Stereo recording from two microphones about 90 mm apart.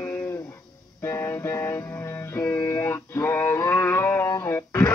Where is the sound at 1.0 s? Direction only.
30° left (ahead or behind).